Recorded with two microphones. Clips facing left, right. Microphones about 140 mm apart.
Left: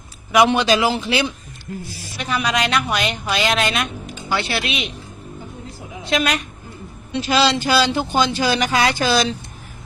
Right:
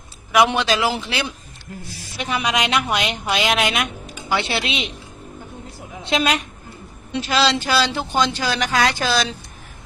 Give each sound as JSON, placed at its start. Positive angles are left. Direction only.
{"t": 0.3, "sound": "speech", "side_deg": 0}
{"t": 2.1, "sound": "a woman's voice", "side_deg": -20}
{"t": 6.1, "sound": "a woman's voice", "side_deg": -25}
{"t": 7.2, "sound": "speech", "side_deg": 0}